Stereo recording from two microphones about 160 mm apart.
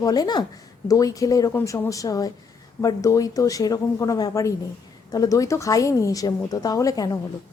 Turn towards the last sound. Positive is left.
turn(degrees=20)  # may be behind; listen again after turning